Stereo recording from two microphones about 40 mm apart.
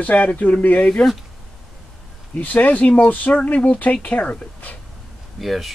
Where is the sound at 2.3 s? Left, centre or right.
Left.